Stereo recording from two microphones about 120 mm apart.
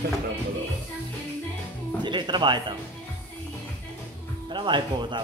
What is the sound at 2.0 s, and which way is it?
Speech, 40° right (ahead or behind).